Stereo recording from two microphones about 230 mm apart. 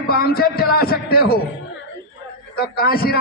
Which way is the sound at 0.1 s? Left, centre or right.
Left.